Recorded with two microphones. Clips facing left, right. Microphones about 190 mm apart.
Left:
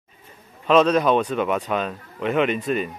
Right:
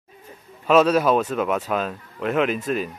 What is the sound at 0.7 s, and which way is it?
Speech, 5° right (ahead or behind).